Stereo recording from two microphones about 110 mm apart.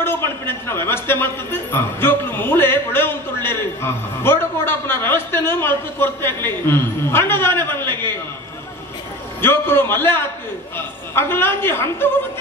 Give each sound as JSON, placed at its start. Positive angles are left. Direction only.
{"t": 0.0, "sound": "a sound", "side_deg": 20}
{"t": 0.8, "sound": "speech", "side_deg": 20}
{"t": 9.4, "sound": "a woman's voice", "side_deg": 20}